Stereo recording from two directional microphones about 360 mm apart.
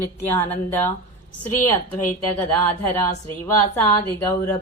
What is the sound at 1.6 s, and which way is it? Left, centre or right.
Speech, left.